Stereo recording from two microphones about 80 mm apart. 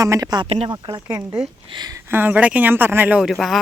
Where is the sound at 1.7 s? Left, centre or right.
Right.